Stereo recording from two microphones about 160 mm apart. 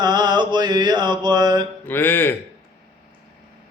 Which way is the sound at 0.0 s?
25° right (ahead or behind).